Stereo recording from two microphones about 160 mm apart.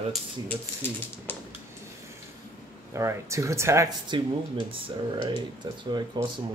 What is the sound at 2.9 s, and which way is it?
Speech, 20° right (ahead or behind).